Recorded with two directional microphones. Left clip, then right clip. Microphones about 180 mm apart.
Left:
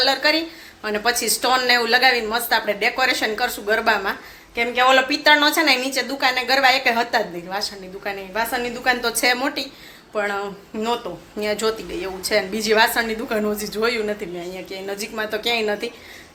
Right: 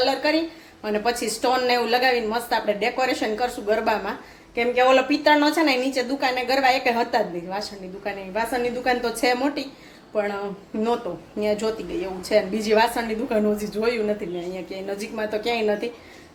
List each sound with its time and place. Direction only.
0.0 s a woman's voice: 5° right (ahead or behind)